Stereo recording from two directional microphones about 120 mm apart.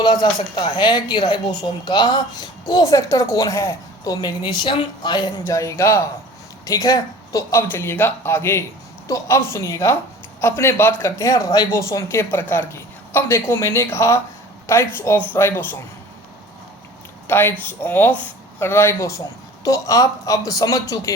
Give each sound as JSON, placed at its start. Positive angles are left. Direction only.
{"t": 0.0, "sound": "speech", "side_deg": 35}
{"t": 5.5, "sound": "speech", "side_deg": 25}
{"t": 7.5, "sound": "speech", "side_deg": 20}
{"t": 17.2, "sound": "speech", "side_deg": 20}